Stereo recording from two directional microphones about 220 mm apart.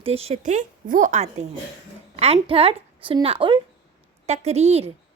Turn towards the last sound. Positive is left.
turn(degrees=-30)  # may be behind; listen again after turning